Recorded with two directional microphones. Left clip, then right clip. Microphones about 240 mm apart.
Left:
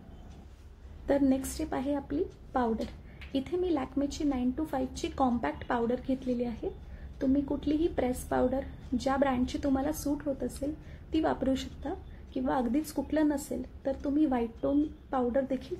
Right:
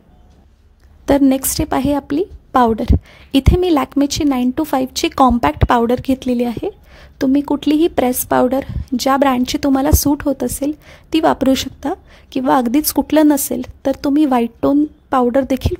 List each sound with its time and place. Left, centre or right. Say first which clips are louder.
1.0 s a woman's voice: right 14 dB; right